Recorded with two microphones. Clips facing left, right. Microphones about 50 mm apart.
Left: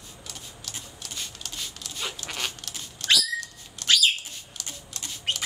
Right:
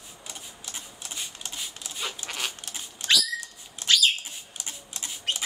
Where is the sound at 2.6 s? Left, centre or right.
Right.